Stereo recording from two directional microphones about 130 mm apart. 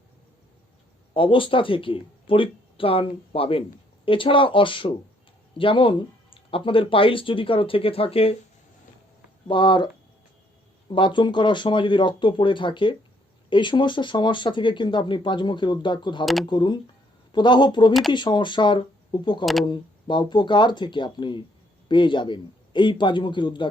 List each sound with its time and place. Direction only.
1.1 s speech: 40° left (ahead or behind)
9.5 s speech: 40° left (ahead or behind)
10.8 s speech: 40° left (ahead or behind)
16.2 s speech: centre (ahead or behind)
16.5 s speech: 35° left (ahead or behind)